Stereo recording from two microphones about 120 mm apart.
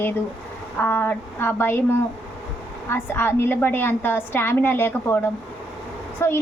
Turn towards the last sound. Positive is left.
turn(degrees=20)  # may be behind; listen again after turning